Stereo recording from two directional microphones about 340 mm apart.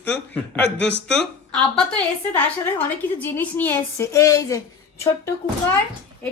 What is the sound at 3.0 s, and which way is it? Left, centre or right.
A woman's voice, centre.